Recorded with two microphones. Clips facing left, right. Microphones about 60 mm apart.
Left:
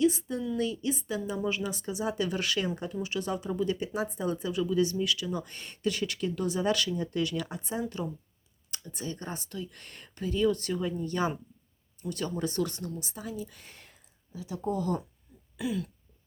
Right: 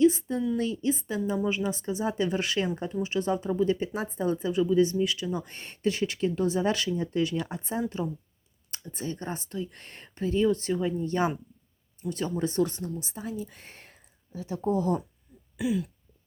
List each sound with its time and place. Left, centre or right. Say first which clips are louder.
0.0 s a sound: right 4 dB; right
0.5 s speech: right 3 dB; right
15.5 s throat clearing: right 4 dB; centre